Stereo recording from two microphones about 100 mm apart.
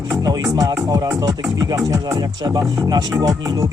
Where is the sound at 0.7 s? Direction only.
35° right (ahead or behind).